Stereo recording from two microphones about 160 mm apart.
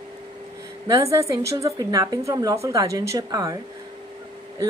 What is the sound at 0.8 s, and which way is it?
A woman's voice, 20° right (ahead or behind).